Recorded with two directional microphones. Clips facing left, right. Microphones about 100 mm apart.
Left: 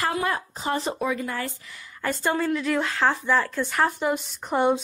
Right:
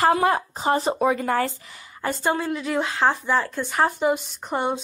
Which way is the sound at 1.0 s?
45° right (ahead or behind).